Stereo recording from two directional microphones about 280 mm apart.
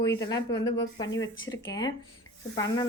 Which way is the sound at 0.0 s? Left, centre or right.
Centre.